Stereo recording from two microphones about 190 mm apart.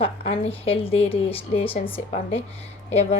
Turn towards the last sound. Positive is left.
turn(degrees=30)  # may be behind; listen again after turning